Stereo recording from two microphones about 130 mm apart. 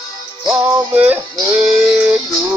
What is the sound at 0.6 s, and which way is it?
Music, 10° right (ahead or behind).